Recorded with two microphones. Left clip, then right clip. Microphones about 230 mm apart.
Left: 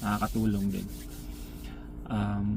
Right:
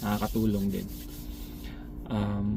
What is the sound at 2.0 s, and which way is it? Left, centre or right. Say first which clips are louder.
Speech: right 1 dB; centre.